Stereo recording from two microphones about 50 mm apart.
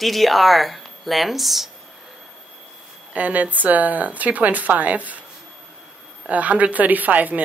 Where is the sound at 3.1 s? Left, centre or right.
Right.